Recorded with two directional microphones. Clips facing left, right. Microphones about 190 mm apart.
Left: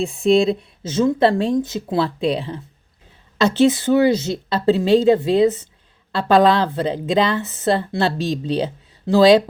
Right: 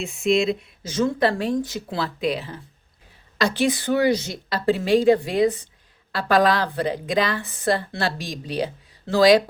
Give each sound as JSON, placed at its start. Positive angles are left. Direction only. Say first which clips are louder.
{"t": 0.0, "sound": "speech", "louder": "left 5 dB", "side_deg": 35}